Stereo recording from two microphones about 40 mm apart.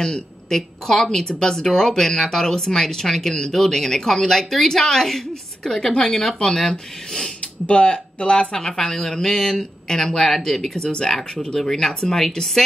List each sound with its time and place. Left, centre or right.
0.0 s speech: centre
7.6 s speech: left
8.5 s speech: centre